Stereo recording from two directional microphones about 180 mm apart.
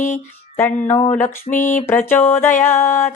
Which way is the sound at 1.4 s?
45° left (ahead or behind).